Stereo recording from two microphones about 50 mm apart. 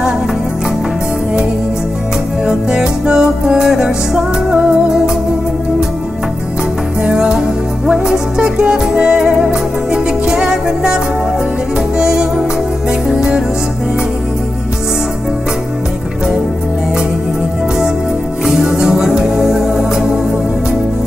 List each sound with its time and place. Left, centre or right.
2.4 s music: centre
7.0 s music: centre
12.0 s music: centre
18.4 s music: centre